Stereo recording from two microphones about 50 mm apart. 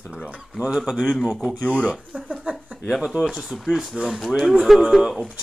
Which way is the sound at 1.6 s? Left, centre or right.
Left.